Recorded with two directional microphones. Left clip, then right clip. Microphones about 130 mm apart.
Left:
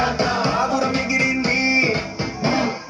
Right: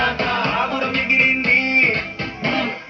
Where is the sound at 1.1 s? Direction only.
40° left (ahead or behind).